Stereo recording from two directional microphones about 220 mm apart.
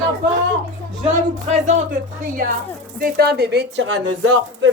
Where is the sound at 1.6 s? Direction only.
35° right (ahead or behind).